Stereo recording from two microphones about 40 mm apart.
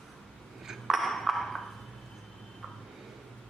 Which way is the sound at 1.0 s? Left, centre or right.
Centre.